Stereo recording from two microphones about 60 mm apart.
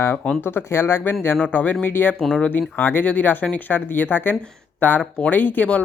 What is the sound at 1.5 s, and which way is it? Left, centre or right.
Speech, left.